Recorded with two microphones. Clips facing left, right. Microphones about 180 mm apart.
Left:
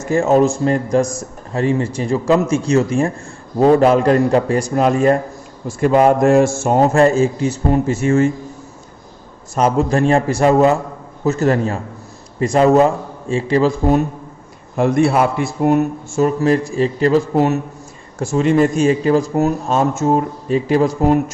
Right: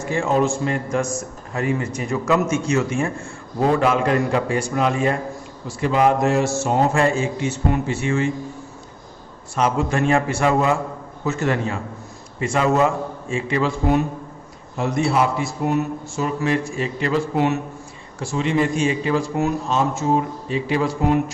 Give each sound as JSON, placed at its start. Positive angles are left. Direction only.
{"t": 0.0, "sound": "a man's voice", "side_deg": 40}
{"t": 9.6, "sound": "a man's voice", "side_deg": 40}
{"t": 14.8, "sound": "speech", "side_deg": 55}